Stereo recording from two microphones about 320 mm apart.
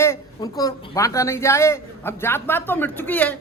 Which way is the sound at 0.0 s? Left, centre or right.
Centre.